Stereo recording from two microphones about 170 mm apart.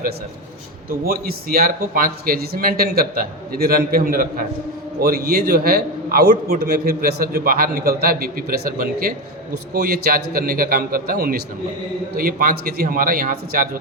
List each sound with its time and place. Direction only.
0.9 s a man's voice: 60° right (ahead or behind)